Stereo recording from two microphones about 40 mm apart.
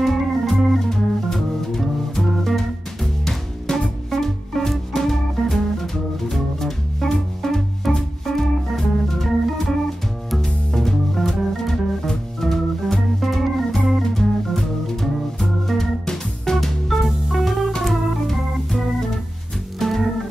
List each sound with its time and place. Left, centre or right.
0.0 s organ: centre
10.4 s music: centre
17.8 s organ: centre
19.8 s music: centre